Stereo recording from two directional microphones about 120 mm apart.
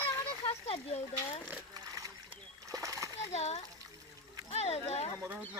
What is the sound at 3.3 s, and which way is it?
Speech, 65° left (ahead or behind).